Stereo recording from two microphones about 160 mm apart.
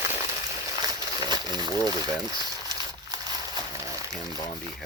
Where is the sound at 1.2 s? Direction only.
25° right (ahead or behind).